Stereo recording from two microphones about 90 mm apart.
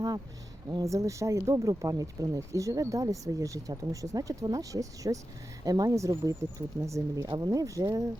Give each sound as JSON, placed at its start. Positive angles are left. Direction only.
{"t": 0.8, "sound": "speech", "side_deg": -35}